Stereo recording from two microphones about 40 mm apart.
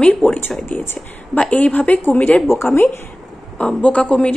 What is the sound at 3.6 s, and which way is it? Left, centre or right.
Speech, left.